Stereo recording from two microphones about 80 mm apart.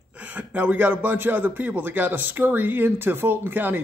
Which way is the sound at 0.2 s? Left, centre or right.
Centre.